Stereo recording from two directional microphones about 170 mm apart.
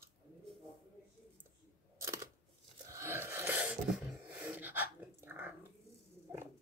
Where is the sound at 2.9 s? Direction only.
15° right (ahead or behind).